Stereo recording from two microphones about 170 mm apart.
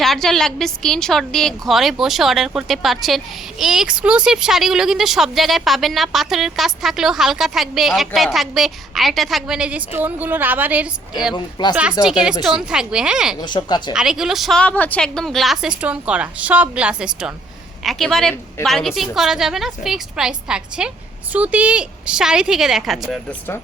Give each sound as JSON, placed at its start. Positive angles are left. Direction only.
{"t": 0.0, "sound": "a woman's voice", "side_deg": 0}
{"t": 11.6, "sound": "speech", "side_deg": 25}
{"t": 12.4, "sound": "a woman's voice", "side_deg": -5}
{"t": 13.4, "sound": "speech", "side_deg": 25}
{"t": 13.9, "sound": "a woman's voice", "side_deg": -5}